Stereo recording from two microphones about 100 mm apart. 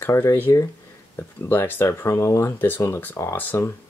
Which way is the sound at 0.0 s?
25° left (ahead or behind).